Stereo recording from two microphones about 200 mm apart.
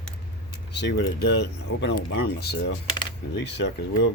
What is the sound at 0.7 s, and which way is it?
Speech, 60° left (ahead or behind).